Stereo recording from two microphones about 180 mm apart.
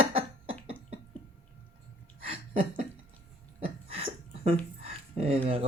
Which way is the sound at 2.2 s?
35° right (ahead or behind).